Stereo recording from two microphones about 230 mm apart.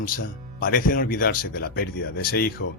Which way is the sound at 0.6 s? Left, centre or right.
Left.